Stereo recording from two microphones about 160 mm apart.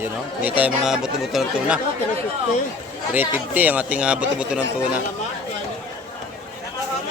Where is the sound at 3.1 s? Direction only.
10° right (ahead or behind).